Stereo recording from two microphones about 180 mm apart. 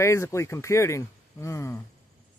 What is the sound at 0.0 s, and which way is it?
Speech, 15° left (ahead or behind).